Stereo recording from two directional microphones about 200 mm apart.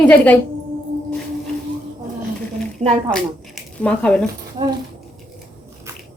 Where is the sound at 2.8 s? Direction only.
35° right (ahead or behind).